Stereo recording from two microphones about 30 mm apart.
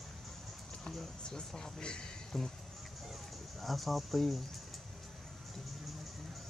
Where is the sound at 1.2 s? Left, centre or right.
Left.